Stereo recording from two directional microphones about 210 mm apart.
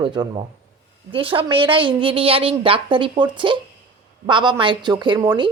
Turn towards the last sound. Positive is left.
turn(degrees=-20)  # may be behind; listen again after turning